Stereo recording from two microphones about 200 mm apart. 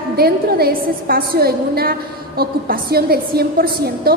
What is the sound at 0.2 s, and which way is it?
A woman's voice, 50° right (ahead or behind).